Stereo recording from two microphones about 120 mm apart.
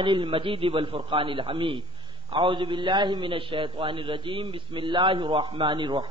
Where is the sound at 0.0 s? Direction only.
45° right (ahead or behind).